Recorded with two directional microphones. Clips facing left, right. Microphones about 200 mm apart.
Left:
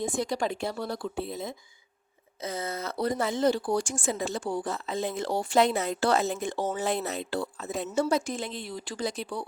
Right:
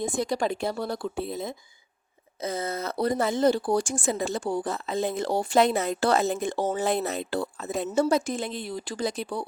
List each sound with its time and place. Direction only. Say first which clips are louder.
0.0 s speech: right 2 dB; 40° right (ahead or behind)